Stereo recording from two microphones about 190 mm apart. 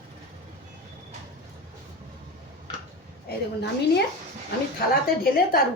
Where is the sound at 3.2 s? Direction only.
60° left (ahead or behind).